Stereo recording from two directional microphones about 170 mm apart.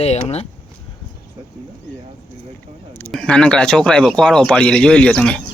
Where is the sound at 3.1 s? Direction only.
5° left (ahead or behind).